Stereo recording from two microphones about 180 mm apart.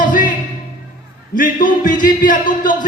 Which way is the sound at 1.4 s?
50° left (ahead or behind).